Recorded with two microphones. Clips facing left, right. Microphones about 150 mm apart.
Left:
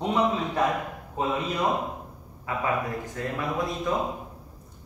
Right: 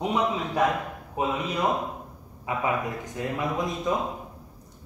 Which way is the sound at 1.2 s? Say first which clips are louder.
Right 1 dB; 15° right (ahead or behind).